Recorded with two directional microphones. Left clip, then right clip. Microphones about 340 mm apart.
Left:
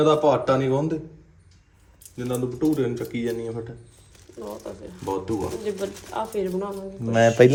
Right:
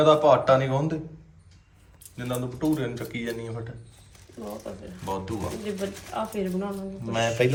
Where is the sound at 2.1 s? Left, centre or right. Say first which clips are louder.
Left 4 dB; centre.